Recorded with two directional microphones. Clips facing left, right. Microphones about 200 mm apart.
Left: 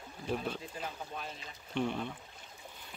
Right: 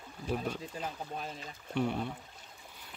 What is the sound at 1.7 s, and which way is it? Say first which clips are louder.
Speech: right 2 dB; 5° right (ahead or behind).